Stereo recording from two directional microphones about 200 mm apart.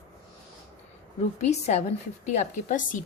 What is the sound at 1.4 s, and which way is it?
Speech, 35° left (ahead or behind).